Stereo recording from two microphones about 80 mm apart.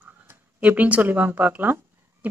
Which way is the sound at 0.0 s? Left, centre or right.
Centre.